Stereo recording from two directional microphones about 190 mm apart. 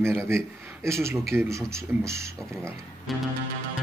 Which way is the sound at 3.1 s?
Centre (ahead or behind).